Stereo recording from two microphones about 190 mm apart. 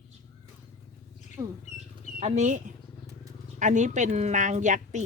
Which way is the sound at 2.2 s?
40° right (ahead or behind).